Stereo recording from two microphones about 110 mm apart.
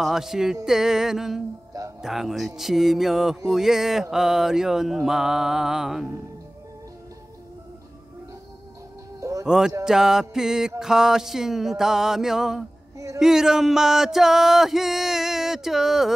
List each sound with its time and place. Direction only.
0.0 s music: 5° right (ahead or behind)
9.2 s music: 30° right (ahead or behind)
9.8 s music: 5° right (ahead or behind)